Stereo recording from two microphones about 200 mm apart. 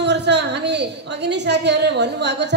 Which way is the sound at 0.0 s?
60° right (ahead or behind).